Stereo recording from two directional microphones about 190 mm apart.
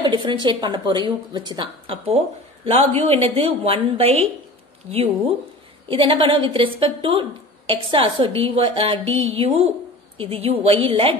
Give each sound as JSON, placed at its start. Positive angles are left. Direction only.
{"t": 0.0, "sound": "a woman's voice", "side_deg": -25}
{"t": 5.9, "sound": "a woman's voice", "side_deg": -30}